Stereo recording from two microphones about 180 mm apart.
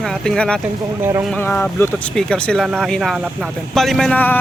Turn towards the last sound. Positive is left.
turn(degrees=5)  # may be behind; listen again after turning